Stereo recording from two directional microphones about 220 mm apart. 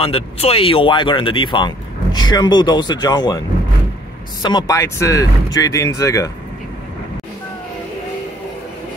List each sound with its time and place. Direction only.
0.0 s speech: 25° left (ahead or behind)